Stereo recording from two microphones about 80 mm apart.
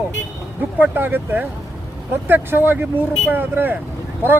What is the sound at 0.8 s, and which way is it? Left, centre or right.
Speech, right.